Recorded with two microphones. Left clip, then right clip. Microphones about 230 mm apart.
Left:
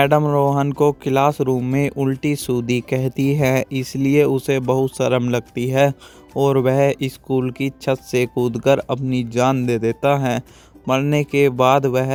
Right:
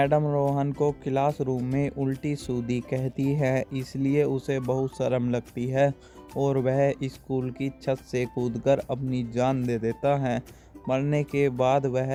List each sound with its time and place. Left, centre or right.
0.0 s speech: left